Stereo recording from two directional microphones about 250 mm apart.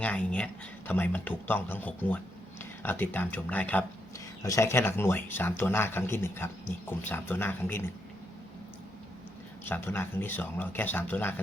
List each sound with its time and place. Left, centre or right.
0.0 s speech: centre
9.6 s speech: centre